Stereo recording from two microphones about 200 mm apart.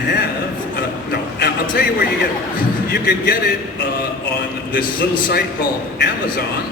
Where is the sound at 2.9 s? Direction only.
50° left (ahead or behind).